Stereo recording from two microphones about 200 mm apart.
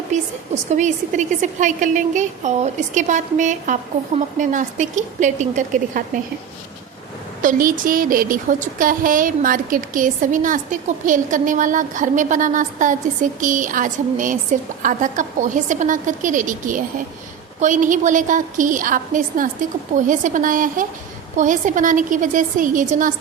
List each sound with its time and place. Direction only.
0.1 s speech: 35° right (ahead or behind)
7.4 s speech: 45° right (ahead or behind)